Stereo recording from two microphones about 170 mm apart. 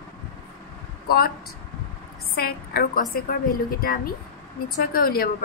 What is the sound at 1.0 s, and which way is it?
Speech, 65° left (ahead or behind).